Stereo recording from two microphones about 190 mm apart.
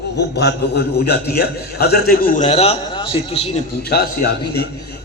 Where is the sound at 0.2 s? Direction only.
60° left (ahead or behind); by 3.6 s 30° left (ahead or behind).